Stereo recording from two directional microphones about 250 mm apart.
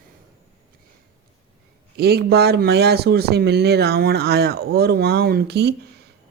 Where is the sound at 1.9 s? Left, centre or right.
Right.